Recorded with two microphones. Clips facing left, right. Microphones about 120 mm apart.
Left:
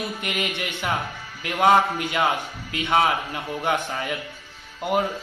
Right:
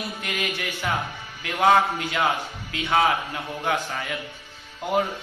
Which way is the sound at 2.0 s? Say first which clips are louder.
Left 1 dB; 15° left (ahead or behind).